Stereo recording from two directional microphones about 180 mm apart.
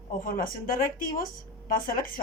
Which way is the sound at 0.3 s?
50° left (ahead or behind).